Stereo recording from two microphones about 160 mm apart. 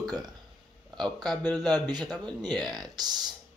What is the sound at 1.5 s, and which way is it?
Speech, 25° right (ahead or behind).